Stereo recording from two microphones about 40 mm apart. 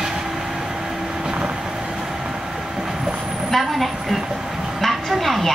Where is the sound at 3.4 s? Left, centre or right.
Centre.